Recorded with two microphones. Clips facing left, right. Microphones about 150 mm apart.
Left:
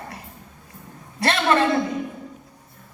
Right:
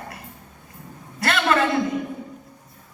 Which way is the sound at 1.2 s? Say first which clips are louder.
Left 1 dB; 30° left (ahead or behind).